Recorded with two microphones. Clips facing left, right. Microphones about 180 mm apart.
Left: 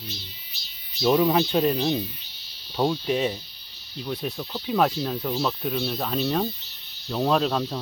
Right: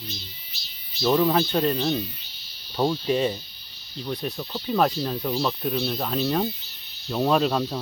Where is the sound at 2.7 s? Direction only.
Centre (ahead or behind).